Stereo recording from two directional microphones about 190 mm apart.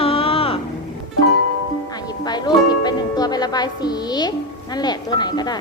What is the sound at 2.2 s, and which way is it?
Music, 20° left (ahead or behind).